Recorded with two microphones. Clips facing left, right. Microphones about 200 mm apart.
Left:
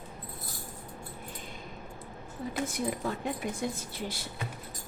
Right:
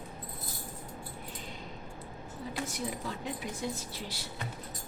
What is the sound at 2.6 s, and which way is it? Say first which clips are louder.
A woman's voice: left 7 dB; 55° left (ahead or behind).